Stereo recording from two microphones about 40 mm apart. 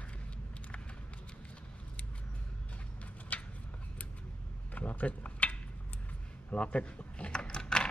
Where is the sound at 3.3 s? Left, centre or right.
Left.